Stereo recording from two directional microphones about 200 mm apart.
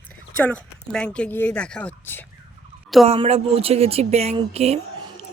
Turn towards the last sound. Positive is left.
turn(degrees=-30)  # may be behind; listen again after turning